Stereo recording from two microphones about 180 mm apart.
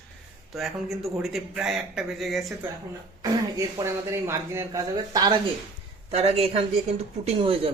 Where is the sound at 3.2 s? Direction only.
20° right (ahead or behind).